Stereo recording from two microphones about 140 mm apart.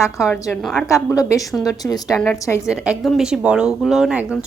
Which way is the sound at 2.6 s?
5° right (ahead or behind).